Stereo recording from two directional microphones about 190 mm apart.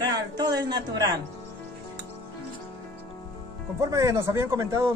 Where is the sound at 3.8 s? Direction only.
15° right (ahead or behind).